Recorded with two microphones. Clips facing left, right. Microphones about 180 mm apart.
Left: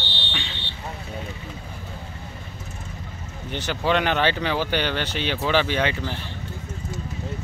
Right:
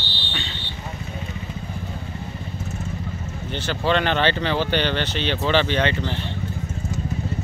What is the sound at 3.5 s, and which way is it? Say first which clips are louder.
Speech: right 1 dB; 15° left (ahead or behind).